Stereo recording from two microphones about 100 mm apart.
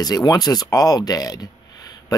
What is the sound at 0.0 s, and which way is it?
Speech, 40° left (ahead or behind).